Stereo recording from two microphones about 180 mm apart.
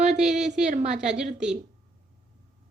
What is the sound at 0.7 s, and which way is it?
Speech, 40° right (ahead or behind).